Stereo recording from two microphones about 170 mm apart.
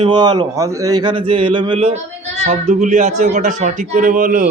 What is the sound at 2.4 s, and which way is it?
Speech, 45° right (ahead or behind).